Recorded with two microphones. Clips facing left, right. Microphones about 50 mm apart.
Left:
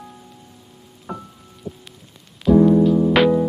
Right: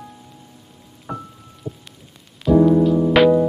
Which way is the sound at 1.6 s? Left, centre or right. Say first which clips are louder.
Right 1 dB; right.